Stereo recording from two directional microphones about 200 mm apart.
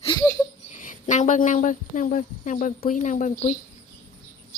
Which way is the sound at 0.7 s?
40° left (ahead or behind).